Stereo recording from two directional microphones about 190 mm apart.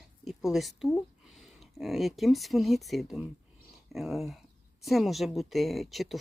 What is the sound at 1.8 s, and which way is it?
A woman's voice, centre (ahead or behind).